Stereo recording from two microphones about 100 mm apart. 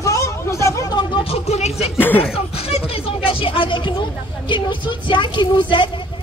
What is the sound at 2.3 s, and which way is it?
Speech, 75° left (ahead or behind).